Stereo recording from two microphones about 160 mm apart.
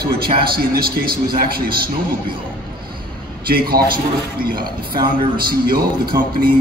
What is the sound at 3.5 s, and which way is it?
Speech, 70° right (ahead or behind).